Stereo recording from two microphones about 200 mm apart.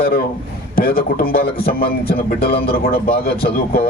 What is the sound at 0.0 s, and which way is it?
A man's voice, 50° left (ahead or behind).